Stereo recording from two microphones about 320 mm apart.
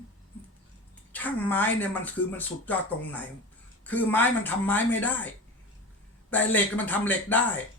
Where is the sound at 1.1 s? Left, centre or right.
Centre.